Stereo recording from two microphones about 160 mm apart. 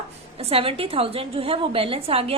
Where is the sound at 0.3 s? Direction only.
35° right (ahead or behind).